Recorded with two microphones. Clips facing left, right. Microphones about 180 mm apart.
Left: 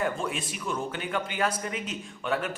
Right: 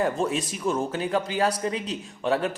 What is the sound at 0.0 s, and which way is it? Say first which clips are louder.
Speech: right 5 dB; 35° right (ahead or behind).